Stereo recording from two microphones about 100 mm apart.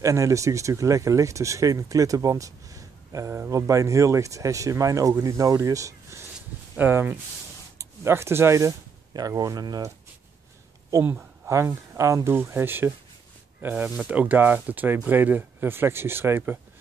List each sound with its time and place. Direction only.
0.0 s speech: 35° right (ahead or behind)
6.8 s speech: 20° right (ahead or behind); by 9.8 s 35° right (ahead or behind)
11.4 s speech: 30° right (ahead or behind)